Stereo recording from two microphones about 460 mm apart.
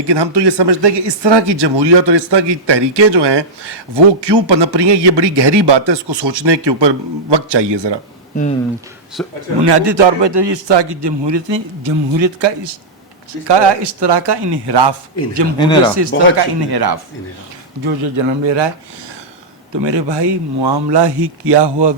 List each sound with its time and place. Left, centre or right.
0.0 s speech: right
9.2 s speech: centre
9.6 s speech: right
15.5 s speech: centre
15.8 s speech: right
17.8 s speech: right
19.8 s speech: right